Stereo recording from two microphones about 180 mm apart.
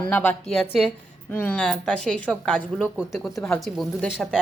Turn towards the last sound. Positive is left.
turn(degrees=0)  # may be behind; listen again after turning